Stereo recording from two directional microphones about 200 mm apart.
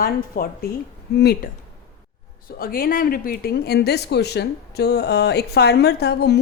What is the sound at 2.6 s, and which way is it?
Speech, 50° left (ahead or behind).